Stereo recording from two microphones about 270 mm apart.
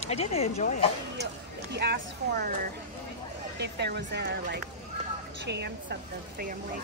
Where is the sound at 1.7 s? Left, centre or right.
Right.